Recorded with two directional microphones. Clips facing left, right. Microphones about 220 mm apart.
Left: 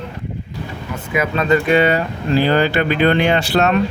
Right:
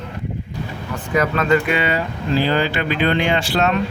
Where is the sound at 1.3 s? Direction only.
25° left (ahead or behind).